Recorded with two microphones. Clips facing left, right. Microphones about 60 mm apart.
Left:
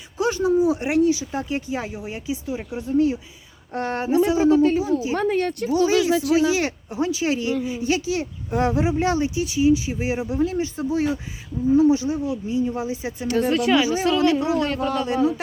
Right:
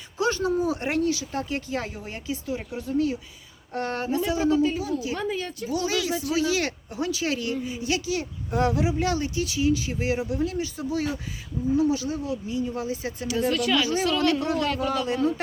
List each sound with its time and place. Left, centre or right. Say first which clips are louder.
0.2 s speech: left 5 dB; centre
5.1 s speech: left 8 dB; left
5.7 s speech: left 8 dB; left
13.2 s speech: left 4 dB; left
13.5 s a man's voice: left 5 dB; left; by 15.4 s centre